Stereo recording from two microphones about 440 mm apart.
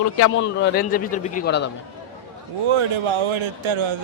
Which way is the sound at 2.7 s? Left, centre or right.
Right.